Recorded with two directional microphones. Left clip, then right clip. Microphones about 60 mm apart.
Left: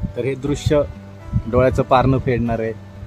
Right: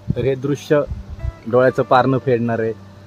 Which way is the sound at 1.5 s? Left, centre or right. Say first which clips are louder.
Right 1 dB; centre.